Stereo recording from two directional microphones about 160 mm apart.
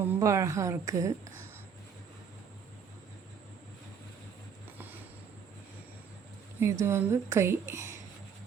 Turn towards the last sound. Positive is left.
turn(degrees=-15)  # may be behind; listen again after turning